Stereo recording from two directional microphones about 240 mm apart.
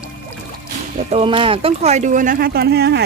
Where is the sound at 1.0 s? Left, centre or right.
Right.